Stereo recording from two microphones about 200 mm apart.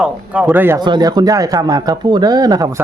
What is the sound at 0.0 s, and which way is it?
Speech, 10° right (ahead or behind).